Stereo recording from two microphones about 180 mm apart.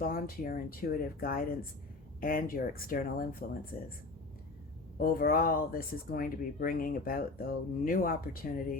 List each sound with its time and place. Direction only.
0.0 s speech: 55° left (ahead or behind)
4.9 s speech: 55° left (ahead or behind)